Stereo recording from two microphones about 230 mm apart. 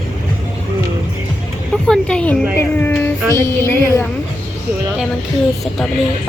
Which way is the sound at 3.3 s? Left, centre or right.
Centre.